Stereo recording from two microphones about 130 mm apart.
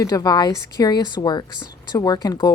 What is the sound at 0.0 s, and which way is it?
A woman's voice, 30° left (ahead or behind).